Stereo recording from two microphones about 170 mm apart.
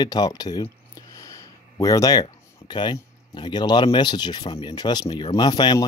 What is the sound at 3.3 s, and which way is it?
Speech, 25° left (ahead or behind).